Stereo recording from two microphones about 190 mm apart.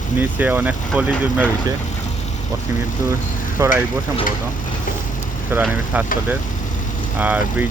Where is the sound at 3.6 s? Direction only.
15° right (ahead or behind).